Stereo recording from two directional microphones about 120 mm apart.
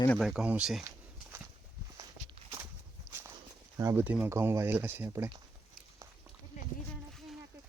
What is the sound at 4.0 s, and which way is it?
Speech, 15° right (ahead or behind).